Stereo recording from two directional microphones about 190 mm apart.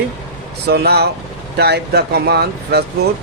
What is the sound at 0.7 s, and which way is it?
Speech, 60° right (ahead or behind).